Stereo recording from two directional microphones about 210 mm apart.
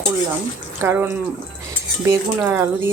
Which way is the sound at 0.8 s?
10° right (ahead or behind).